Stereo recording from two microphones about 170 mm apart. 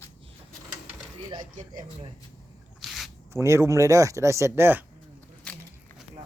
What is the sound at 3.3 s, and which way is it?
Speech, 15° right (ahead or behind).